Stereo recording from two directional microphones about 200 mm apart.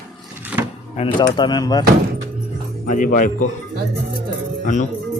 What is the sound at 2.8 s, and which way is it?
Speech, 40° left (ahead or behind).